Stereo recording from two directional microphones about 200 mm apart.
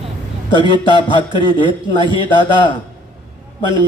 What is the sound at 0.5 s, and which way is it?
Speech, 25° left (ahead or behind).